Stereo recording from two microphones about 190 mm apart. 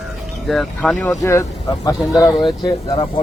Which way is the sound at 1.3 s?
20° left (ahead or behind).